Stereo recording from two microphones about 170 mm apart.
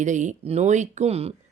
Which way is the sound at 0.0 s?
45° right (ahead or behind).